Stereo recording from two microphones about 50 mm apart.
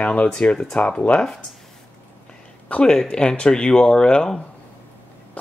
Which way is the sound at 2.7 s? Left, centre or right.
Centre.